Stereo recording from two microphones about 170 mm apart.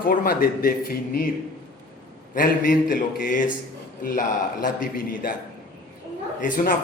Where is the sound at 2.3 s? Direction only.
55° left (ahead or behind).